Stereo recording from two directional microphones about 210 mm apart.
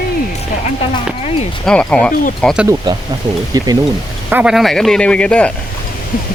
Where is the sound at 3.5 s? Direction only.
15° right (ahead or behind).